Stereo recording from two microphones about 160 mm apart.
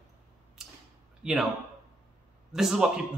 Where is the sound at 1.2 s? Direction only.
5° right (ahead or behind).